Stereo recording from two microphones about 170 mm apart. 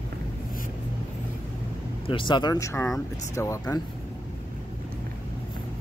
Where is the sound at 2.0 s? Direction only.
30° left (ahead or behind).